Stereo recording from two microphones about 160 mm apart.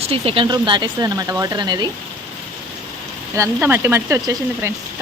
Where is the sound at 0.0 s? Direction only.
35° right (ahead or behind).